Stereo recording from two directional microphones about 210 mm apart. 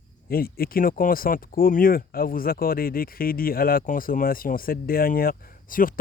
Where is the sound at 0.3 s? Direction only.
45° left (ahead or behind).